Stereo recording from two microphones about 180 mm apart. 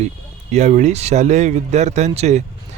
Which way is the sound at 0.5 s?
40° right (ahead or behind).